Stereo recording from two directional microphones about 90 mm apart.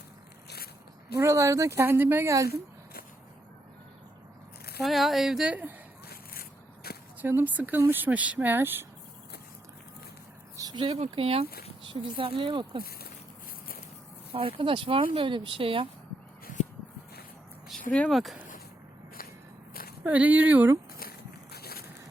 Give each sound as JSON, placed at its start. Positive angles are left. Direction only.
{"t": 1.1, "sound": "speech", "side_deg": -35}
{"t": 4.8, "sound": "speech", "side_deg": 0}
{"t": 7.2, "sound": "speech", "side_deg": -20}
{"t": 10.6, "sound": "a sound", "side_deg": -45}
{"t": 10.8, "sound": "speech", "side_deg": -90}
{"t": 14.3, "sound": "speech", "side_deg": -85}
{"t": 18.1, "sound": "speech", "side_deg": 0}
{"t": 20.1, "sound": "speech", "side_deg": -15}